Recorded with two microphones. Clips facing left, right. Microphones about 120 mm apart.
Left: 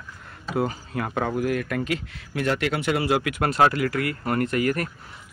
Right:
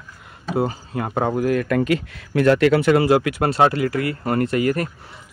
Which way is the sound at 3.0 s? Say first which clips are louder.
Right 6 dB; 40° right (ahead or behind).